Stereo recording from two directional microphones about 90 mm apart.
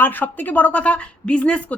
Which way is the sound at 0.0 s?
20° left (ahead or behind).